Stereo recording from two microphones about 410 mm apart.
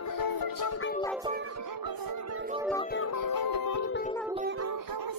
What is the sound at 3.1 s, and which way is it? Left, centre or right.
Music, left.